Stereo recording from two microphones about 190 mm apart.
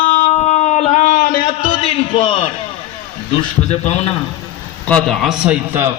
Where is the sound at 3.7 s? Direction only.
35° left (ahead or behind).